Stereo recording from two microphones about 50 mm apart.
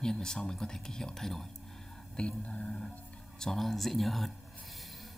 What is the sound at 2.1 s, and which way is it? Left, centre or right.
Music, left.